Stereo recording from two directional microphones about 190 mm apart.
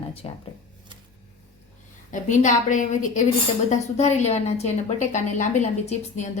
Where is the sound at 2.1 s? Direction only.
40° left (ahead or behind).